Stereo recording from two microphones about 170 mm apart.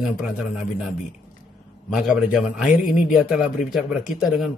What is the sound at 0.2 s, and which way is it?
Speech, centre (ahead or behind).